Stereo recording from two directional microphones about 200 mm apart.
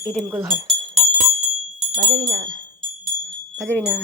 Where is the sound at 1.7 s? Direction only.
25° right (ahead or behind).